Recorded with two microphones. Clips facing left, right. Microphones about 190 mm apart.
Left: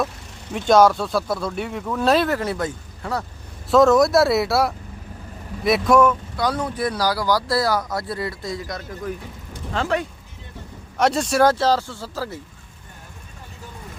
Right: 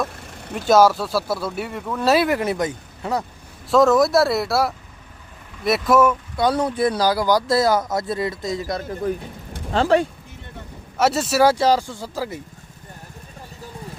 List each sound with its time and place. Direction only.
0.5 s speech: 5° right (ahead or behind)
3.7 s speech: centre (ahead or behind)
6.3 s speech: 30° right (ahead or behind)
10.9 s speech: 5° right (ahead or behind)